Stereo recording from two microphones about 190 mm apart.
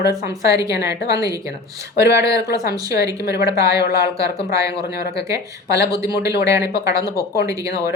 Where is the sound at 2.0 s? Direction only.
15° right (ahead or behind).